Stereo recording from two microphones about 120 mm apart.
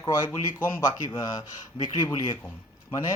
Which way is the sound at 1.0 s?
40° left (ahead or behind).